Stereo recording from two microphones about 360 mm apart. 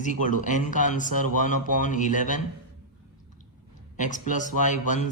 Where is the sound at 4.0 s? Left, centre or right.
Left.